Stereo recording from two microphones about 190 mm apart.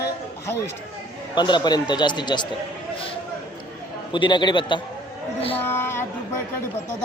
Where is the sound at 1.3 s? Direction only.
25° left (ahead or behind).